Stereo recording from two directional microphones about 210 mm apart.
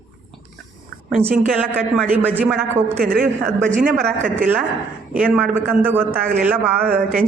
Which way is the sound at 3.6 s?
35° right (ahead or behind).